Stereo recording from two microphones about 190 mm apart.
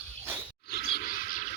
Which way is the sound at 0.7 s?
55° left (ahead or behind).